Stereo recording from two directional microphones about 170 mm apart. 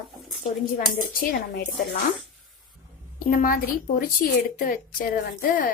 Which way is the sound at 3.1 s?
55° left (ahead or behind).